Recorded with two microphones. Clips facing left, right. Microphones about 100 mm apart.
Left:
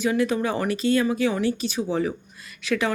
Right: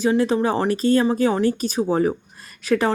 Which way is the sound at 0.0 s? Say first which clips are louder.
Right 4 dB; 35° right (ahead or behind).